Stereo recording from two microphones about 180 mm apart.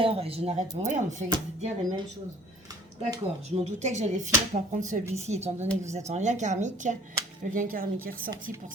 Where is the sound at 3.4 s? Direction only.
40° right (ahead or behind).